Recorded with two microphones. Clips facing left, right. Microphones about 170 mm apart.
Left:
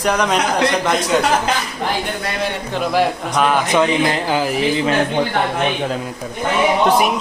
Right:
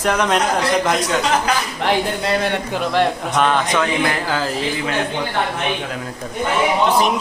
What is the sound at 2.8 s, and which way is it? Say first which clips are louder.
A man's voice: left 2 dB; 5° left (ahead or behind).